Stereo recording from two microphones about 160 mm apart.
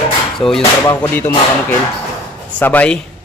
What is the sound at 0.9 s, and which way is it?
Speech, 15° left (ahead or behind).